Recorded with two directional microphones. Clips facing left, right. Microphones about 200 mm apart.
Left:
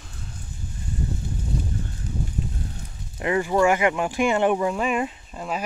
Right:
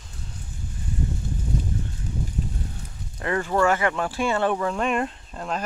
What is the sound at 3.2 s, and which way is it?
Speech, 10° left (ahead or behind).